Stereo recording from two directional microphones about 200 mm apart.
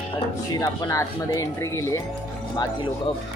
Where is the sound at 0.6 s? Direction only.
15° left (ahead or behind).